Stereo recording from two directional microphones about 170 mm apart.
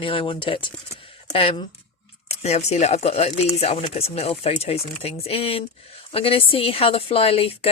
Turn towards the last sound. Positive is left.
turn(degrees=35)  # may be behind; listen again after turning